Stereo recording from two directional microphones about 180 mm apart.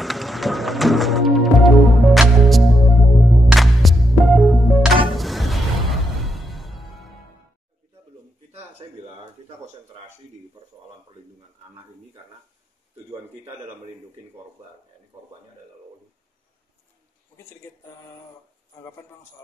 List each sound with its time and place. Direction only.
0.0 s music: centre (ahead or behind)
8.5 s a sound: 35° right (ahead or behind)
17.4 s speech: 15° left (ahead or behind)